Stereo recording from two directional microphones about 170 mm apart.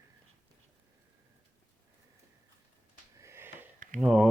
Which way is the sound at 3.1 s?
15° right (ahead or behind).